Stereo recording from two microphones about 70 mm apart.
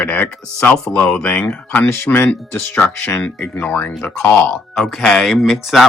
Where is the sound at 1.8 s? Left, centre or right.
Left.